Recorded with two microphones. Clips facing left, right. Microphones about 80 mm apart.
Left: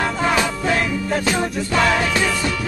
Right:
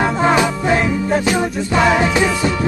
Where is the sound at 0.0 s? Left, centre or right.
Right.